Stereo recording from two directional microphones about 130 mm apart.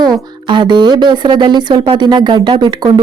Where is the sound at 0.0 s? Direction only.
35° right (ahead or behind).